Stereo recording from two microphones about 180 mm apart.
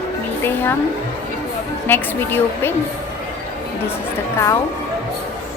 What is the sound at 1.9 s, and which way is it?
Speech, 10° left (ahead or behind).